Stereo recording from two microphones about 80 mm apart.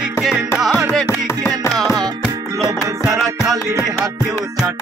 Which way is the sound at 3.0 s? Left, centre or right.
Right.